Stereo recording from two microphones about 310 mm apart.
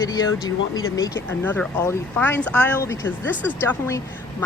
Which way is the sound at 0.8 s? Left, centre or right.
Left.